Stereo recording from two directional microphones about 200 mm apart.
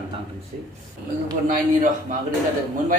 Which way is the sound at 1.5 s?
40° right (ahead or behind).